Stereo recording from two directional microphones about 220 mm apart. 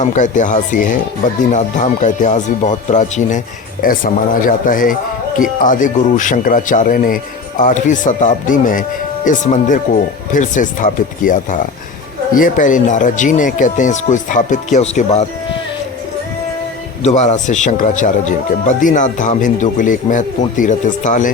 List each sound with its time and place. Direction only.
0.0 s speech: 35° left (ahead or behind)
17.0 s speech: 30° left (ahead or behind)